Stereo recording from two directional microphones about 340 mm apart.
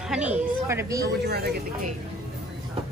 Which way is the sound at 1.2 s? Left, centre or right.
Right.